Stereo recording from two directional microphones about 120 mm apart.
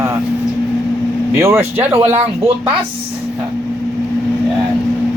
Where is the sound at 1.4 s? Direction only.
20° right (ahead or behind).